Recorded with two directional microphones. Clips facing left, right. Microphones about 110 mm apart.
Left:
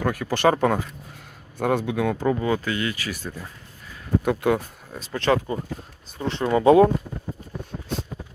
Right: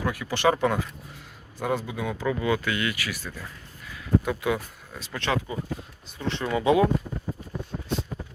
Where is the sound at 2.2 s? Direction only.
35° left (ahead or behind).